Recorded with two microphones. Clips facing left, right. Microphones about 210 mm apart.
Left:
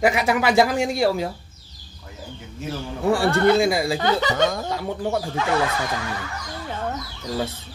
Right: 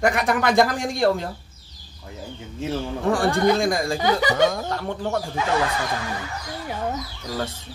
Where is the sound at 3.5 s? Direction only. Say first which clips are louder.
Left 2 dB; 5° left (ahead or behind).